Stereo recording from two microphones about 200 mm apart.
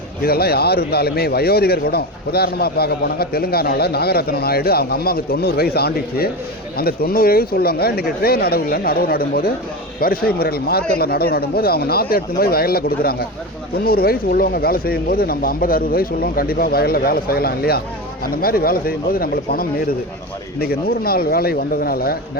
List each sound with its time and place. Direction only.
0.2 s speech: 50° left (ahead or behind)